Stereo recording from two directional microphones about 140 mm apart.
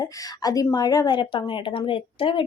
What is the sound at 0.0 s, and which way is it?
Speech, 25° left (ahead or behind).